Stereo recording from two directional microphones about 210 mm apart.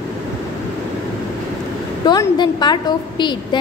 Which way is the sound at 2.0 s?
20° left (ahead or behind).